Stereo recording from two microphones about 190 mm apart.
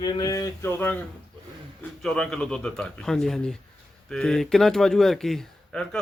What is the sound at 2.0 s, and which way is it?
A man's voice, 5° left (ahead or behind).